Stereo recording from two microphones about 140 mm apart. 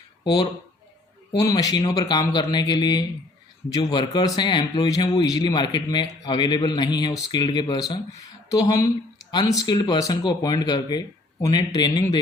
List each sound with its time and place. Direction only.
1.3 s a man's voice: 25° left (ahead or behind)